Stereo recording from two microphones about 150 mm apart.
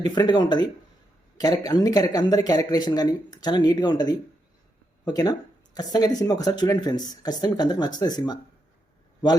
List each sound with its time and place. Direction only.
0.0 s speech: 25° left (ahead or behind)